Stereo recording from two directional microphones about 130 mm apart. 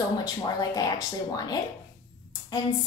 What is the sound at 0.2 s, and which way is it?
A woman's voice, 30° left (ahead or behind).